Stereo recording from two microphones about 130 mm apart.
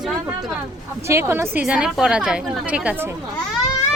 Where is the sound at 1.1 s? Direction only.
20° right (ahead or behind).